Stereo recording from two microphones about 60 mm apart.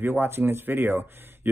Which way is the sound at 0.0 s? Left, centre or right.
Right.